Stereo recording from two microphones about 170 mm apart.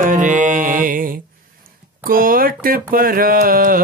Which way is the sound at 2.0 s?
55° right (ahead or behind).